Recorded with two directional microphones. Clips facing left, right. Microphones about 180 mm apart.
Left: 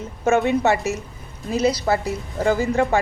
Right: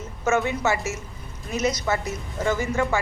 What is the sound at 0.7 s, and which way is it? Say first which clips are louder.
Speech: left 5 dB; 35° left (ahead or behind).